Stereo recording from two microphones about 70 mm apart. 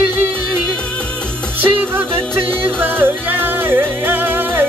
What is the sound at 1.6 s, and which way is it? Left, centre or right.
Music, right.